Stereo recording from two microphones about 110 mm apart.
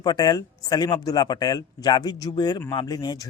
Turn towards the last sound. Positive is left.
turn(degrees=35)  # may be behind; listen again after turning